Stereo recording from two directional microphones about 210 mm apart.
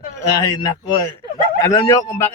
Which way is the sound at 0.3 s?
15° left (ahead or behind).